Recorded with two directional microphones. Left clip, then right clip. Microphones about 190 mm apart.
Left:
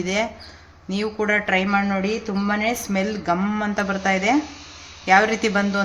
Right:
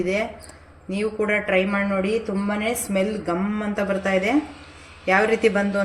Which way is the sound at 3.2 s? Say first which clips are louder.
Left 3 dB; 30° left (ahead or behind).